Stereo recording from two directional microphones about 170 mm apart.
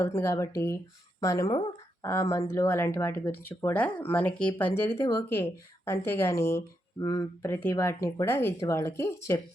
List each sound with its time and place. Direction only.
0.0 s speech: 15° left (ahead or behind)
2.5 s speech: 15° left (ahead or behind)